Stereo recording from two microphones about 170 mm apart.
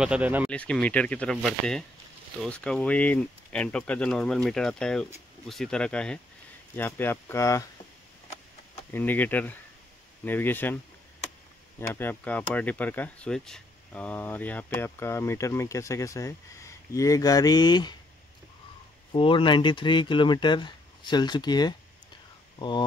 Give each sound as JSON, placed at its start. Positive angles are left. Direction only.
{"t": 0.0, "sound": "speech", "side_deg": -5}
{"t": 0.5, "sound": "speech", "side_deg": 5}
{"t": 8.9, "sound": "speech", "side_deg": 10}
{"t": 11.9, "sound": "speech", "side_deg": 10}
{"t": 19.1, "sound": "speech", "side_deg": 30}